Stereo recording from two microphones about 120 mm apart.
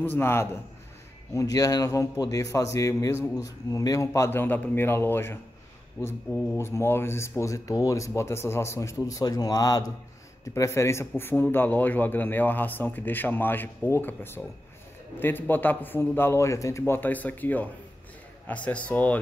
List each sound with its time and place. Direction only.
0.0 s speech: 15° left (ahead or behind)
1.3 s speech: 30° left (ahead or behind); by 19.1 s 10° left (ahead or behind)